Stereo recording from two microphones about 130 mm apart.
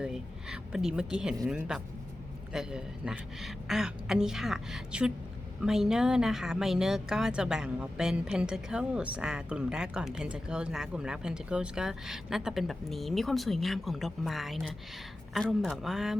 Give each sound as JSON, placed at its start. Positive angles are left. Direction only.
{"t": 0.0, "sound": "speech", "side_deg": -5}